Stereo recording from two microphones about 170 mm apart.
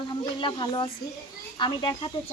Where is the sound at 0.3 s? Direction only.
30° left (ahead or behind).